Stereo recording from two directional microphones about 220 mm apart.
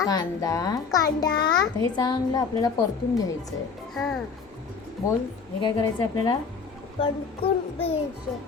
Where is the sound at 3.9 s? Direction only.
Centre (ahead or behind).